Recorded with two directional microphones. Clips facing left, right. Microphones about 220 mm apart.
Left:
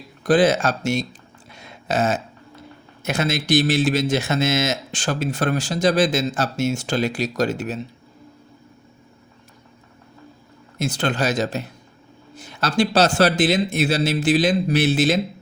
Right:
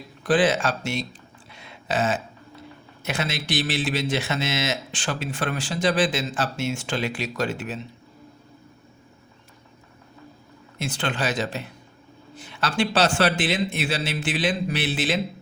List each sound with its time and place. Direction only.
0.2 s speech: 40° left (ahead or behind)
1.5 s a sound: 45° left (ahead or behind)
3.0 s speech: 45° left (ahead or behind)
10.8 s speech: 40° left (ahead or behind)